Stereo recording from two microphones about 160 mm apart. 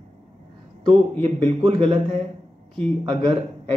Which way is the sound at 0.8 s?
40° right (ahead or behind).